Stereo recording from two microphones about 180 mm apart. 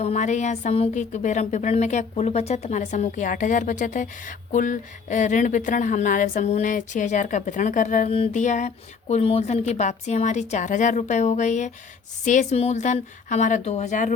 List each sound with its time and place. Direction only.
0.0 s a woman's voice: 40° left (ahead or behind)